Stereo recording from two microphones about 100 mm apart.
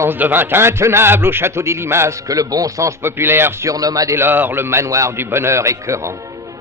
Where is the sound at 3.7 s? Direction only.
35° right (ahead or behind).